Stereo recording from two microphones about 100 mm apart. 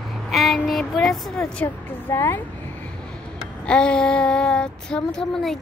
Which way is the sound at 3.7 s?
10° left (ahead or behind).